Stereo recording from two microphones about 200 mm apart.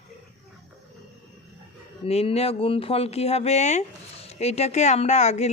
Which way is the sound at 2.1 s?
30° left (ahead or behind).